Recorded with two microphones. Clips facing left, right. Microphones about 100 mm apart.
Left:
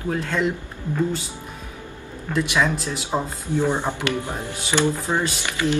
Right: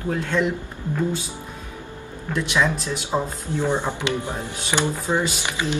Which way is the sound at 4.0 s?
20° right (ahead or behind).